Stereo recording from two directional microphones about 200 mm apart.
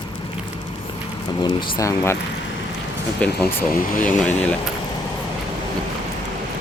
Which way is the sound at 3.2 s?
5° left (ahead or behind).